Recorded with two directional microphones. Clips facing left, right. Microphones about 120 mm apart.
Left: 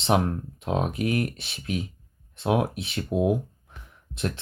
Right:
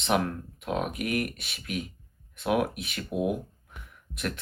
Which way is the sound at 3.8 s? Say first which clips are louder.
Left 3 dB; 30° left (ahead or behind).